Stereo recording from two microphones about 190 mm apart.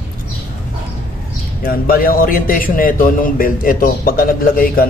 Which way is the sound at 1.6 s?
50° left (ahead or behind).